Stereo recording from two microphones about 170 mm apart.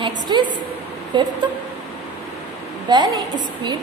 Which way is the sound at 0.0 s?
25° right (ahead or behind).